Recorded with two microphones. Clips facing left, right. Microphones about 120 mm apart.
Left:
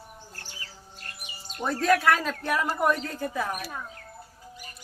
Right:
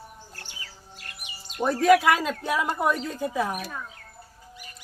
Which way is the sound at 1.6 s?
10° right (ahead or behind).